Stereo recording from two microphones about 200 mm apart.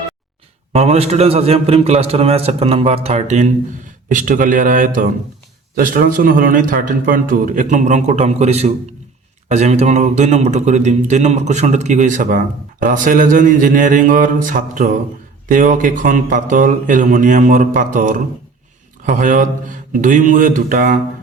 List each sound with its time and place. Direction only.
0.7 s a man's voice: 30° right (ahead or behind)